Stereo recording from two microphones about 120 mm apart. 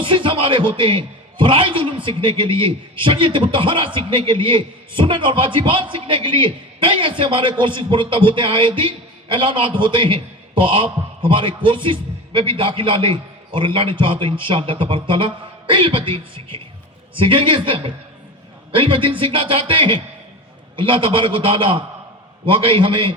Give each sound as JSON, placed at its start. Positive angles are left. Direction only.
{"t": 0.0, "sound": "a man's voice", "side_deg": -45}